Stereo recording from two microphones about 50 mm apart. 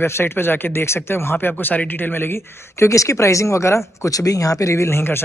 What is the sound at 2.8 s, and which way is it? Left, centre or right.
Speech, left.